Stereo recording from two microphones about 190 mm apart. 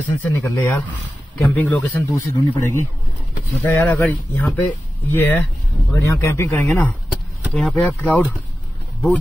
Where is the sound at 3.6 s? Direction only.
10° left (ahead or behind).